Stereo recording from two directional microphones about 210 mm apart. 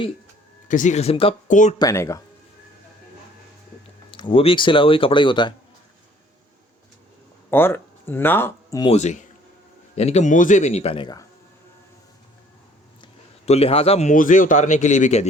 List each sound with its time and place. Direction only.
0.7 s a man's voice: 35° left (ahead or behind)
1.8 s speech: 15° left (ahead or behind)
4.1 s speech: 25° left (ahead or behind)
7.5 s speech: 10° left (ahead or behind)
8.9 s a man's voice: 35° left (ahead or behind)
13.0 s speech: 30° left (ahead or behind)